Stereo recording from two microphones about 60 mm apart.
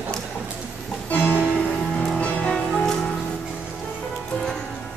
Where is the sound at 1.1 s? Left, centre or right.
Left.